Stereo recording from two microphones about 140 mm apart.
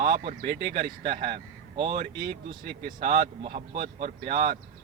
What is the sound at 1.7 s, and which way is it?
Speech, 35° right (ahead or behind).